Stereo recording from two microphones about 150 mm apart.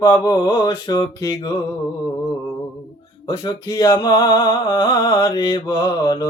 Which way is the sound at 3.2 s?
30° left (ahead or behind).